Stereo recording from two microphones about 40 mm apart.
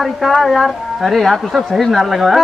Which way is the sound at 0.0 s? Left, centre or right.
Centre.